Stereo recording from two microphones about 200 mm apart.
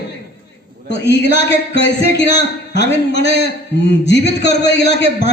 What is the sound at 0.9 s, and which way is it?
A man's voice, 60° left (ahead or behind).